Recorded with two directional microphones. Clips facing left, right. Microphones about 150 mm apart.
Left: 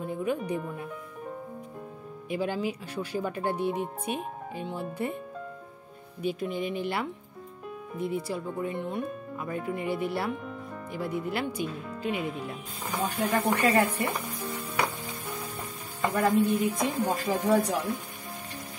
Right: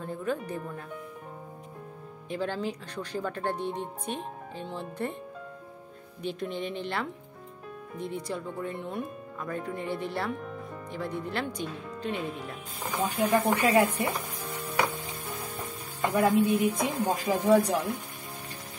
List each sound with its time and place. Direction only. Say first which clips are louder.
0.0 s speech: left 2 dB; 10° left (ahead or behind)
2.2 s speech: left 2 dB; 10° left (ahead or behind)
6.2 s speech: left 3 dB; 5° left (ahead or behind)
13.0 s speech: right 2 dB; 10° right (ahead or behind)
16.0 s music: right 1 dB; 20° right (ahead or behind)
16.6 s speech: even; 15° right (ahead or behind)